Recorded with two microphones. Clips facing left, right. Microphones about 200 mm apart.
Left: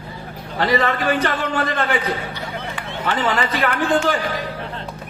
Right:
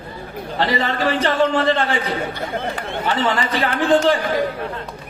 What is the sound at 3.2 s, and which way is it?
Speech, 30° right (ahead or behind).